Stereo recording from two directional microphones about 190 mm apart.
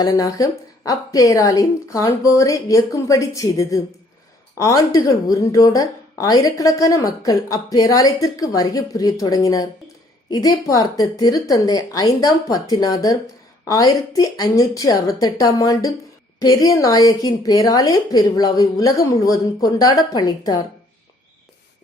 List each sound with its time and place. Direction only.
0.0 s a woman's voice: 20° left (ahead or behind)